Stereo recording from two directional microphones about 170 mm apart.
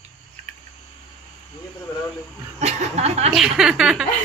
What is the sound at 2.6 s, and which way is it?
Speech, 40° right (ahead or behind).